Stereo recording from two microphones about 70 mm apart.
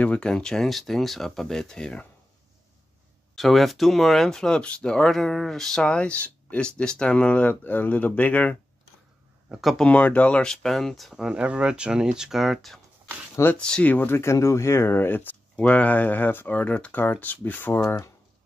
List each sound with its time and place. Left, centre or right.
0.0 s speech: centre
3.3 s speech: centre; by 8.5 s left
9.6 s speech: centre
9.8 s speech: centre
11.2 s speech: centre
13.6 s speech: centre
13.9 s speech: left
17.8 s speech: left